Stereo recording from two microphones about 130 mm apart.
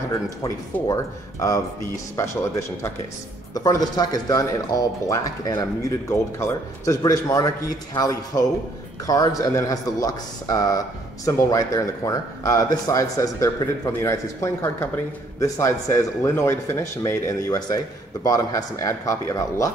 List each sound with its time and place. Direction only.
0.8 s speech: 25° left (ahead or behind)
3.5 s speech: 30° left (ahead or behind)